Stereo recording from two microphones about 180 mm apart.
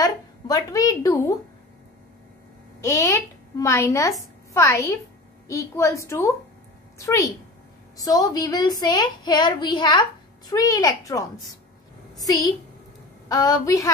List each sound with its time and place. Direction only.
0.0 s a woman's voice: 20° left (ahead or behind)
2.8 s a woman's voice: 15° left (ahead or behind)